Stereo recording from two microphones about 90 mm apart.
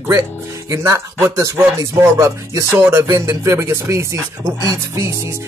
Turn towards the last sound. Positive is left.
turn(degrees=-30)  # may be behind; listen again after turning